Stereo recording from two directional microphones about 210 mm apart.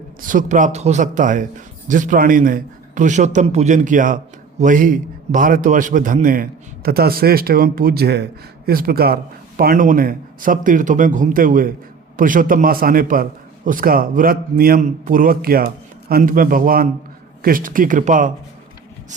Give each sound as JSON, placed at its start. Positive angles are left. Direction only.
{"t": 0.2, "sound": "a man's voice", "side_deg": -40}